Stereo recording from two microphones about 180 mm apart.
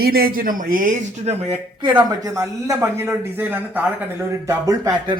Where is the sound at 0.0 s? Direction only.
55° right (ahead or behind).